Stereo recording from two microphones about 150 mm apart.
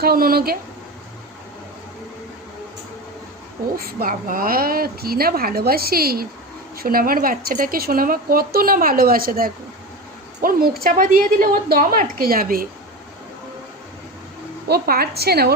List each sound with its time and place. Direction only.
0.0 s a woman's voice: 85° right
3.8 s speech: 75° right (ahead or behind)
6.7 s a woman's voice: 75° right (ahead or behind)
14.7 s a woman's voice: 90° right